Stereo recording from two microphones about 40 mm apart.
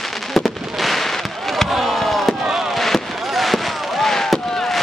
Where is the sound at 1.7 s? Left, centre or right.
Centre.